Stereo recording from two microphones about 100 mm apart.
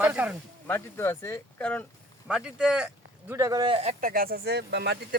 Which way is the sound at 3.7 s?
90° right.